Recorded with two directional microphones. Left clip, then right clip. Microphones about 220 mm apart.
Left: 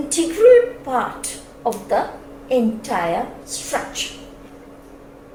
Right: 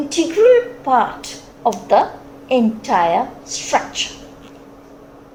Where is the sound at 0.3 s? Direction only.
35° right (ahead or behind).